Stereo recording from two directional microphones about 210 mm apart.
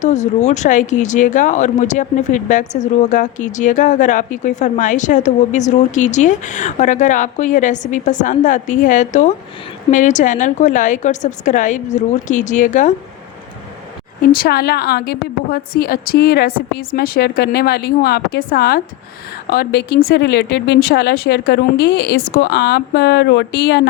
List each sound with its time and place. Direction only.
0.0 s speech: 35° left (ahead or behind)
14.2 s a woman's voice: 45° left (ahead or behind)